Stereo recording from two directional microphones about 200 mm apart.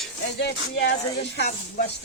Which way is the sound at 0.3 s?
60° left (ahead or behind).